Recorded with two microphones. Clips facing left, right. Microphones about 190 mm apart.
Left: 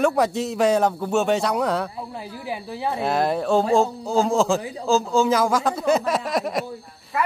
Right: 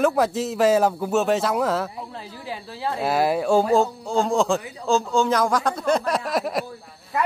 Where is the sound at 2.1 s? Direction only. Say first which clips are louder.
Left 3 dB; 15° left (ahead or behind).